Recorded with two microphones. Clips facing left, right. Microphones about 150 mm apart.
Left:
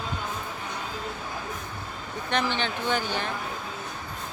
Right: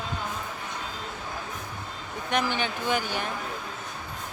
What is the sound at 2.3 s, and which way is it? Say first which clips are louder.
Speech: even; 10° right (ahead or behind).